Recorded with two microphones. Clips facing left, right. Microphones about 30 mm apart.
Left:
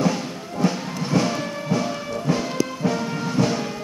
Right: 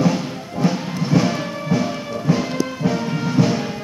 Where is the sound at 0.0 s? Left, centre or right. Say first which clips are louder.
Right 3 dB; centre.